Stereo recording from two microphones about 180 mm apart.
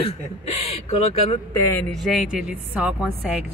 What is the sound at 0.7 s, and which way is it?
Speech, 35° left (ahead or behind).